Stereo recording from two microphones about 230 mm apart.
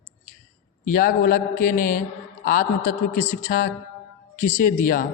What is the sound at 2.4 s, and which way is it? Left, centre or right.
Speech, left.